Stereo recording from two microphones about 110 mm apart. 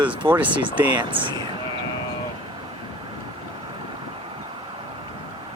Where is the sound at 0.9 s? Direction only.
45° right (ahead or behind).